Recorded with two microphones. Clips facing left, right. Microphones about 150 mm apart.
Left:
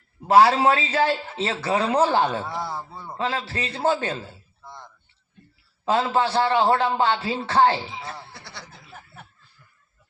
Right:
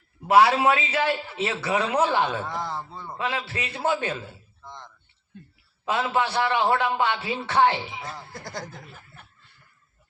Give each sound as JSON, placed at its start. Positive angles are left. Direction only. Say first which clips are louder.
{"t": 0.3, "sound": "a man's voice", "louder": "left 2 dB", "side_deg": 35}
{"t": 2.5, "sound": "speech", "louder": "left 1 dB", "side_deg": 10}
{"t": 3.2, "sound": "a man's voice", "louder": "left 2 dB", "side_deg": 35}
{"t": 4.6, "sound": "a sound", "louder": "even", "side_deg": 10}
{"t": 5.8, "sound": "a man's voice", "louder": "left 3 dB", "side_deg": 30}
{"t": 8.0, "sound": "speech", "louder": "right 1 dB", "side_deg": -45}